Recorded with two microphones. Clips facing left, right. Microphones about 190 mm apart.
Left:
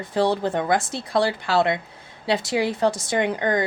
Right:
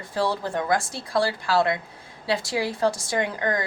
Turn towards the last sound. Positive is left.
turn(degrees=25)  # may be behind; listen again after turning